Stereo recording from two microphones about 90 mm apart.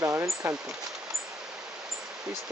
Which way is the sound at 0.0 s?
30° right (ahead or behind).